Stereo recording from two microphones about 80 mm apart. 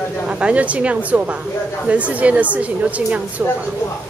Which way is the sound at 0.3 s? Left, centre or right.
Centre.